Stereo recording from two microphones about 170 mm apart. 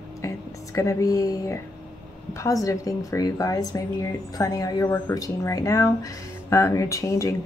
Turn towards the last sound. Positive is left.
turn(degrees=20)  # may be behind; listen again after turning